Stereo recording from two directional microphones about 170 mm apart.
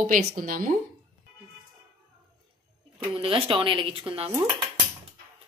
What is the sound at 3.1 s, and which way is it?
Speech, 35° right (ahead or behind).